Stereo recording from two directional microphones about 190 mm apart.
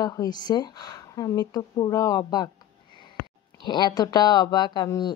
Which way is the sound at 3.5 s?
25° left (ahead or behind).